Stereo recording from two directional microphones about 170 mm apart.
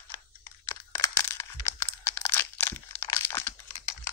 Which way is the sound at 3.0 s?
20° left (ahead or behind).